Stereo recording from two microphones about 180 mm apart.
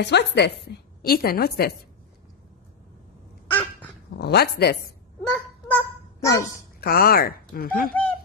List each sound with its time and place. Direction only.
0.0 s a woman's voice: 70° left (ahead or behind)
0.7 s a woman's voice: 60° left (ahead or behind)
4.2 s speech: 65° left (ahead or behind)
5.2 s honk: 5° left (ahead or behind)
6.8 s speech: 60° left (ahead or behind)
7.9 s speech: 10° left (ahead or behind)